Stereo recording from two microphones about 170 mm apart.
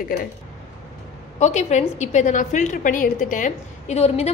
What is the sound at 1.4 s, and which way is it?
A woman's voice, 40° left (ahead or behind).